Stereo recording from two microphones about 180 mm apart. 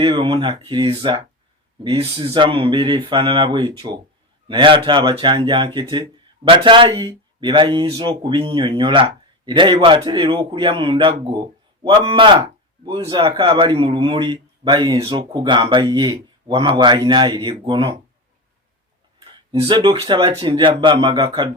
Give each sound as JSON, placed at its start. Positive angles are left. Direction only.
{"t": 0.0, "sound": "speech", "side_deg": -25}
{"t": 19.5, "sound": "speech", "side_deg": -25}